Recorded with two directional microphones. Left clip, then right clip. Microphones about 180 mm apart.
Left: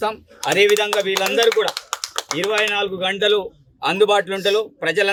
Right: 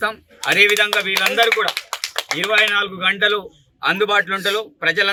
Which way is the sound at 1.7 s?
50° left (ahead or behind).